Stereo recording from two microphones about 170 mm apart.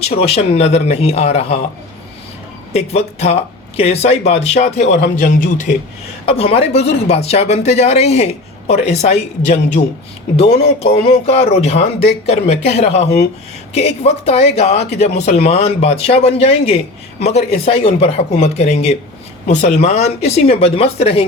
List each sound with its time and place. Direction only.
0.0 s speech: 35° left (ahead or behind)
2.7 s speech: 40° left (ahead or behind)
4.9 s a man's voice: 90° left
5.2 s a man's voice: 50° left (ahead or behind)
6.2 s speech: 35° left (ahead or behind)